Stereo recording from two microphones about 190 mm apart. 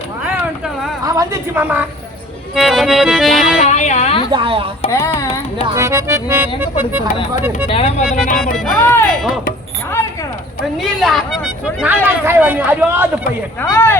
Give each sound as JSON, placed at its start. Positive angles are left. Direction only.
{"t": 1.0, "sound": "a woman's voice", "side_deg": -20}
{"t": 2.6, "sound": "accordion", "side_deg": 0}
{"t": 3.6, "sound": "speech", "side_deg": 40}
{"t": 4.3, "sound": "speech", "side_deg": -25}
{"t": 4.9, "sound": "speech", "side_deg": 15}
{"t": 5.7, "sound": "speech", "side_deg": -15}
{"t": 7.7, "sound": "speech", "side_deg": 30}
{"t": 8.5, "sound": "speech", "side_deg": 5}
{"t": 10.8, "sound": "accordion", "side_deg": 0}
{"t": 11.8, "sound": "speech", "side_deg": -10}
{"t": 13.6, "sound": "speech", "side_deg": 10}